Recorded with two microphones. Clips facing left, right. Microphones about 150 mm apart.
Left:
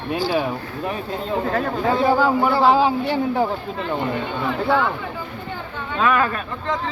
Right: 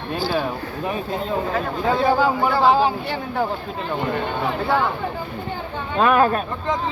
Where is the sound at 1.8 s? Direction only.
Centre (ahead or behind).